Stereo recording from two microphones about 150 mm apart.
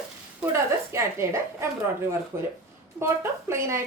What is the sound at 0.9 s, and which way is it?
A woman's voice, 20° right (ahead or behind).